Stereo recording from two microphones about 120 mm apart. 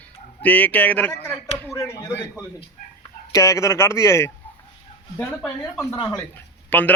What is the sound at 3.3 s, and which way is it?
Speech, 25° left (ahead or behind).